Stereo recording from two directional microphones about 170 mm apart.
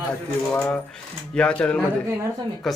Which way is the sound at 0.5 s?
10° left (ahead or behind).